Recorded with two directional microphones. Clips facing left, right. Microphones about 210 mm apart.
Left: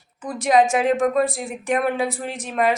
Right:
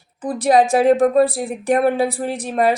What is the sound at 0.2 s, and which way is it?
A woman's voice, 35° right (ahead or behind).